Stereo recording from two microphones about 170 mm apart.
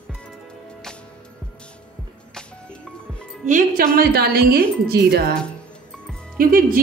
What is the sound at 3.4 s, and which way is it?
Speech, 50° right (ahead or behind).